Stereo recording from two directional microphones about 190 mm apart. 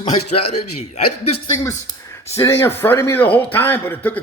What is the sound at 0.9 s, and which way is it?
Speech, 35° left (ahead or behind).